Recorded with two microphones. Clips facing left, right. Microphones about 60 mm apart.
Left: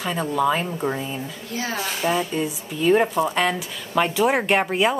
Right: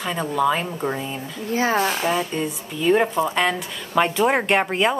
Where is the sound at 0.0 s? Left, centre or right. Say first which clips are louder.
Even; centre.